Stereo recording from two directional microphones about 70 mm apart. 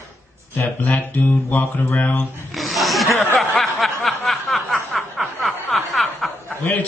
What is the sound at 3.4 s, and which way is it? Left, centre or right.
Snicker, centre.